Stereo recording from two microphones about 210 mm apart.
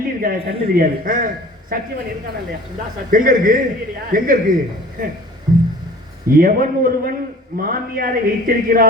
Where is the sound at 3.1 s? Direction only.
40° right (ahead or behind).